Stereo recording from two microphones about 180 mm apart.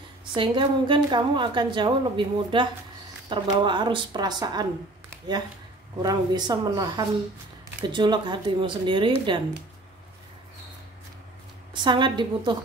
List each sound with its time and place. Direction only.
0.2 s a woman's voice: 25° right (ahead or behind)
6.0 s a woman's voice: 25° right (ahead or behind)
11.7 s a woman's voice: 25° right (ahead or behind)